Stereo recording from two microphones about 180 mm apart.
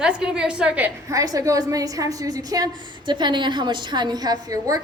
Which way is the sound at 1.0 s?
20° right (ahead or behind).